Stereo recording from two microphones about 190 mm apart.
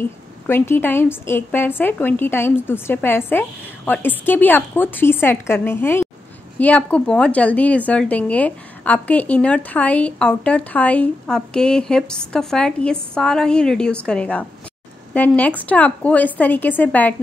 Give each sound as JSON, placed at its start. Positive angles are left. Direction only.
{"t": 0.0, "sound": "a woman's voice", "side_deg": 10}